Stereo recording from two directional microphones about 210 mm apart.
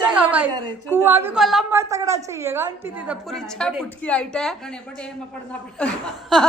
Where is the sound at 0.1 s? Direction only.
5° right (ahead or behind).